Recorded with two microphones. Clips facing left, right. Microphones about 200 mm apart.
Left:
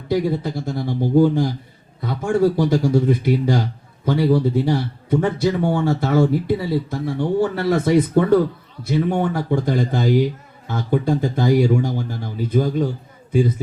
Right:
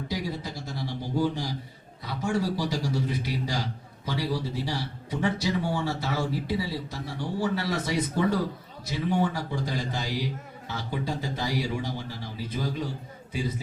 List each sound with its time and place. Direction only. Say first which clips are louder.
0.1 s a man's voice: left 15 dB; 55° left (ahead or behind)